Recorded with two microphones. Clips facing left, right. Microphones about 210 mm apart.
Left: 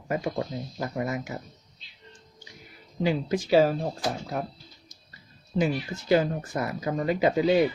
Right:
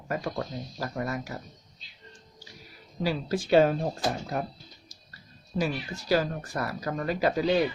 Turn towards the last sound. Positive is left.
turn(degrees=20)  # may be behind; listen again after turning